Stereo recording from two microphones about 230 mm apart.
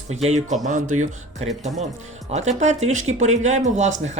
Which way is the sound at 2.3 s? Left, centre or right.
Right.